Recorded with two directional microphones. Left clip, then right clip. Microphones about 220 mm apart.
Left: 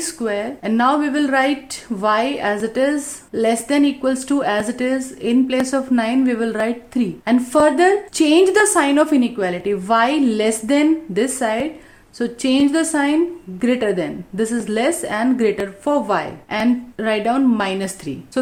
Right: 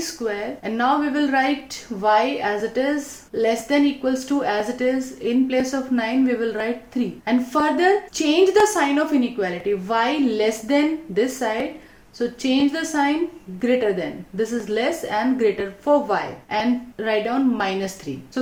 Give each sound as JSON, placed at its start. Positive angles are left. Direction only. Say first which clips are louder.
{"t": 0.3, "sound": "a woman's voice", "louder": "left 5 dB", "side_deg": 45}